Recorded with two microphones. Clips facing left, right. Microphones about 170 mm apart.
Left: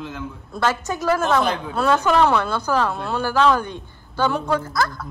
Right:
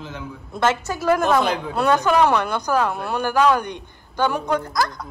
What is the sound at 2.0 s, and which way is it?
Speech, 15° right (ahead or behind).